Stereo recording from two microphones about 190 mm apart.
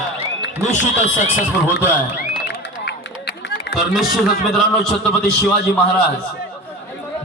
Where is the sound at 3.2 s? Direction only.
60° left (ahead or behind).